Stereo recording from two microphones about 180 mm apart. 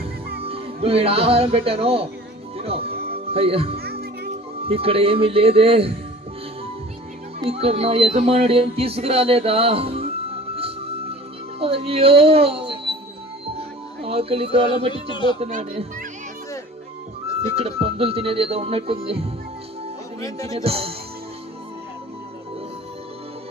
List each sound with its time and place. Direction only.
0.4 s speech: 30° right (ahead or behind)
2.6 s music: 35° right (ahead or behind)
3.8 s music: 60° right (ahead or behind)
4.7 s speech: 30° right (ahead or behind)
7.3 s speech: 35° right (ahead or behind)
10.5 s music: 30° right (ahead or behind)
11.6 s speech: 30° right (ahead or behind)
13.6 s music: 35° right (ahead or behind)
15.1 s speech: 25° left (ahead or behind)
17.4 s speech: 35° right (ahead or behind)
20.7 s speech: 35° right (ahead or behind)